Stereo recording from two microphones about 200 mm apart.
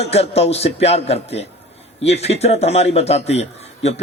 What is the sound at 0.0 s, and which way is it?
A man's voice, 30° left (ahead or behind).